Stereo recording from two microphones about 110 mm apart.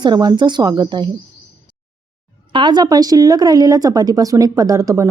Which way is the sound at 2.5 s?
45° right (ahead or behind).